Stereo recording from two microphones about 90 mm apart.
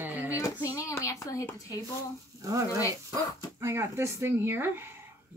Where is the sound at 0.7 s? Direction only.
35° left (ahead or behind).